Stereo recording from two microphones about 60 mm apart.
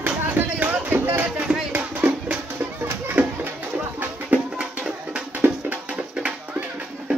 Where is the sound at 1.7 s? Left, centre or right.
Right.